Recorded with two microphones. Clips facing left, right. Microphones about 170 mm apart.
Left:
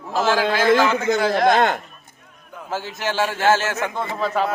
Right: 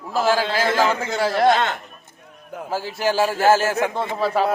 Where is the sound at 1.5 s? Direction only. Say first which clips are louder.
Left 4 dB; 45° left (ahead or behind).